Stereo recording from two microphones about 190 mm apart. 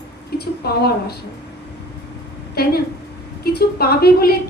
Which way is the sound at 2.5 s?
55° left (ahead or behind).